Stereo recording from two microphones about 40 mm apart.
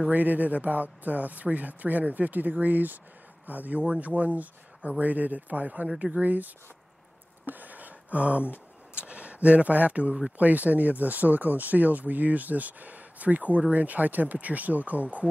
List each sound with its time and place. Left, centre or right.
0.1 s speech: right
3.8 s speech: right
7.4 s a sound: right
8.9 s speech: right